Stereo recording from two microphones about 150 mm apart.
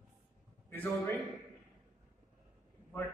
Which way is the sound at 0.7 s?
10° left (ahead or behind).